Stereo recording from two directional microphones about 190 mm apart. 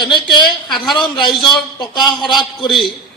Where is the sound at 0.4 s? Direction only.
Centre (ahead or behind).